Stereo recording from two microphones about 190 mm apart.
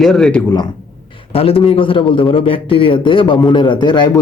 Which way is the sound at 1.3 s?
30° left (ahead or behind).